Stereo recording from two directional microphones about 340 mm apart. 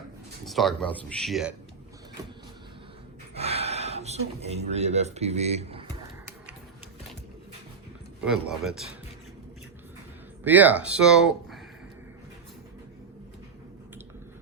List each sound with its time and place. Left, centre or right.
0.4 s speech: centre
3.3 s speech: centre
8.2 s speech: centre
10.4 s speech: centre